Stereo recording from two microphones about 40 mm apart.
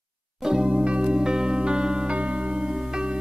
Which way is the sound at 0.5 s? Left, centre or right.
Right.